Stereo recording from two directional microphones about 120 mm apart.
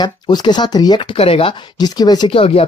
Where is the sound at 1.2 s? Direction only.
55° left (ahead or behind).